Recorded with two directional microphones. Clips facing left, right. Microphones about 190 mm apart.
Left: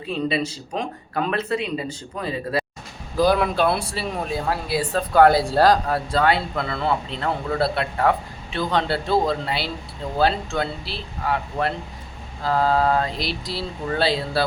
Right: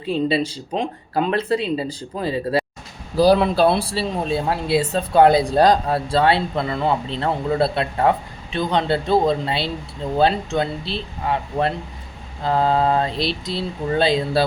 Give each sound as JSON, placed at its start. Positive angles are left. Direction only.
{"t": 0.1, "sound": "speech", "side_deg": -30}